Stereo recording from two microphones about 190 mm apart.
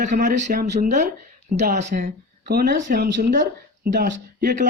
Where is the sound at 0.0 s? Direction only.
40° right (ahead or behind).